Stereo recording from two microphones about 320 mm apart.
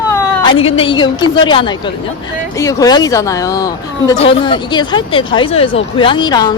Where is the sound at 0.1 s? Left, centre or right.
Centre.